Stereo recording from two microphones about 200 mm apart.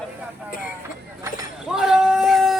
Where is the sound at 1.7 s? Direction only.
Centre (ahead or behind).